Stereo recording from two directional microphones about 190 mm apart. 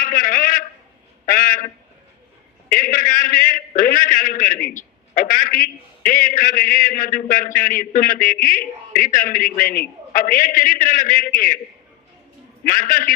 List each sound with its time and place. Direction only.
0.0 s a man's voice: 45° left (ahead or behind)
1.2 s a sound: 45° left (ahead or behind)
2.6 s a man's voice: 45° left (ahead or behind)
12.6 s a man's voice: 45° left (ahead or behind)